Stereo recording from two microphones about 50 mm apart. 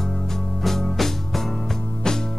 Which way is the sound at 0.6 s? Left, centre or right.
Centre.